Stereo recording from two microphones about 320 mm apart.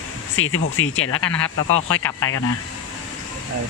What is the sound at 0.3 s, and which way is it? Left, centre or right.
Speech, left.